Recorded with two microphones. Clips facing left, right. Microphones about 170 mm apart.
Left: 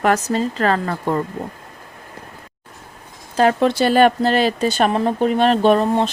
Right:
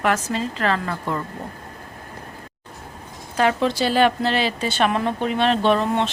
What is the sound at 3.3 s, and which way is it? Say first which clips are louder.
Speech: left 4 dB; 40° left (ahead or behind).